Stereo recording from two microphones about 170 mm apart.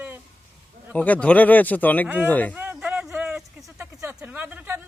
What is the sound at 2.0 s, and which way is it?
Speech, 10° right (ahead or behind).